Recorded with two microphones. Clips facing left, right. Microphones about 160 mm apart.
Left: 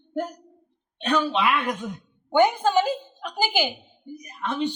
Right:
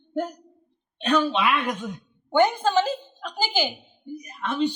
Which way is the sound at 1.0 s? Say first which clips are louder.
Right 1 dB; 10° left (ahead or behind).